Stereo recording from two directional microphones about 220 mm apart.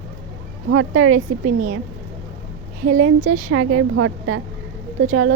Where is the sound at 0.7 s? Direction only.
65° right (ahead or behind).